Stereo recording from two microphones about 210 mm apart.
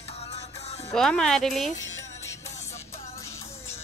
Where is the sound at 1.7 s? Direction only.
65° left (ahead or behind).